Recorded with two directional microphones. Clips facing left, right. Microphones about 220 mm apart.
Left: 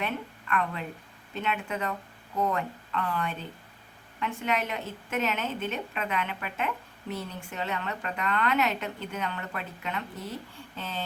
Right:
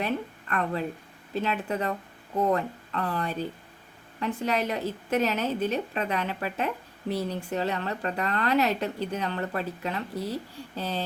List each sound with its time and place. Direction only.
0.0 s a woman's voice: 35° right (ahead or behind)